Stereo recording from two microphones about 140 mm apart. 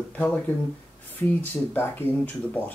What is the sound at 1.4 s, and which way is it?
Speech, 15° left (ahead or behind).